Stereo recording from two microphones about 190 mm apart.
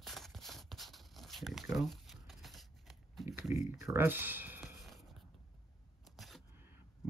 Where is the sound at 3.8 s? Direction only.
15° right (ahead or behind).